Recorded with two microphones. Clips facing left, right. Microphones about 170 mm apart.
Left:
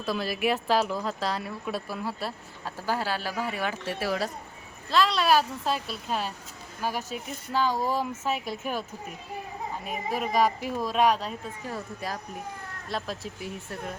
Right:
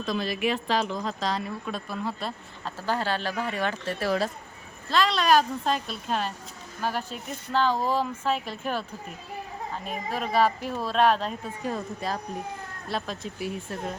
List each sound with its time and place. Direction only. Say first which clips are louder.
0.0 s a woman's voice: even; 5° left (ahead or behind)
9.8 s speech: left 1 dB; 10° left (ahead or behind)
11.6 s speech: right 6 dB; 20° right (ahead or behind)
12.9 s a woman's voice: right 1 dB; 5° left (ahead or behind)